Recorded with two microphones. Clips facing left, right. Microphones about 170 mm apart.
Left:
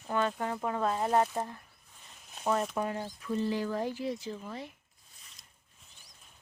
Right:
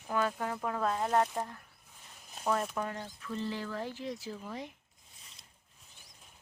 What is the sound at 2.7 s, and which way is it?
Speech, 15° left (ahead or behind).